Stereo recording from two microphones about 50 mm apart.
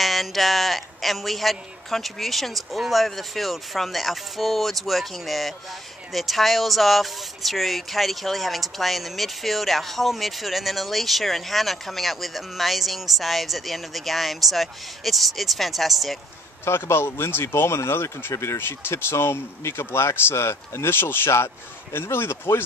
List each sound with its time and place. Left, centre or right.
0.0 s speech: centre
16.6 s speech: left
18.3 s speech: left
18.7 s speech: left